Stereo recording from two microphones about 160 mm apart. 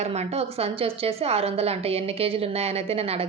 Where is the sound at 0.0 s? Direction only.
45° right (ahead or behind).